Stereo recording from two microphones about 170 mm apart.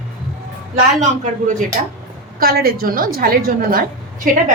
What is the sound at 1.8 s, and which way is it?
Speech, 50° right (ahead or behind).